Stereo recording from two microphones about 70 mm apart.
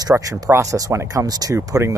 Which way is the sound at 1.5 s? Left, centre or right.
Right.